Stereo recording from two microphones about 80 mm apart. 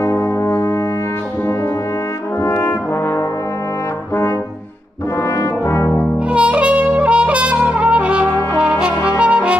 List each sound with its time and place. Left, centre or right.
0.0 s brass instrument: left
2.4 s brass instrument: left
5.4 s brass instrument: left
6.3 s trumpet: centre
8.5 s brass instrument: centre